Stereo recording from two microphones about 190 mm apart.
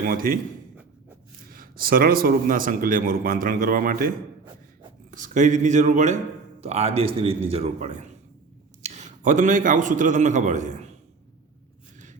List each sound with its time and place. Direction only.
0.0 s speech: 50° right (ahead or behind)
1.5 s speech: 50° right (ahead or behind)
5.1 s a man's voice: 40° right (ahead or behind)